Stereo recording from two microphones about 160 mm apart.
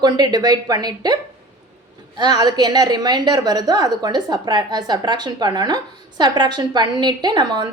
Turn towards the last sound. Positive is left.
turn(degrees=-25)  # may be behind; listen again after turning